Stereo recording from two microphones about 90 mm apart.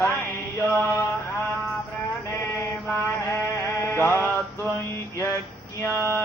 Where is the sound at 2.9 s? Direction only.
30° left (ahead or behind).